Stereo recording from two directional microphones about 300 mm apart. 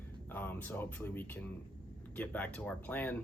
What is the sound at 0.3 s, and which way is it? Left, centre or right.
Speech, centre.